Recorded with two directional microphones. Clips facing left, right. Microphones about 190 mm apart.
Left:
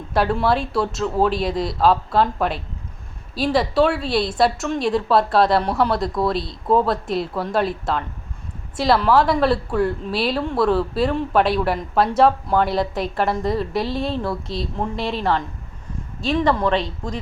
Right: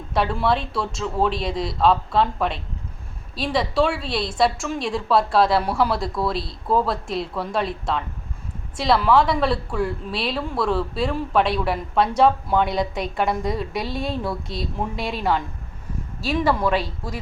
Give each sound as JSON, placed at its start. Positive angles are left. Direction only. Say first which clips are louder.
{"t": 0.1, "sound": "speech", "louder": "left 2 dB", "side_deg": 0}